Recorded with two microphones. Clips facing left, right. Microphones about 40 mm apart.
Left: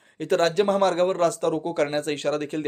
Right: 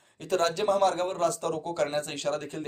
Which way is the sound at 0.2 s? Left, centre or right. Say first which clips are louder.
Left 6 dB; left.